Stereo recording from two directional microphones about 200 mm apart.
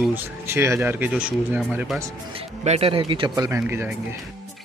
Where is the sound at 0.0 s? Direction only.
10° right (ahead or behind).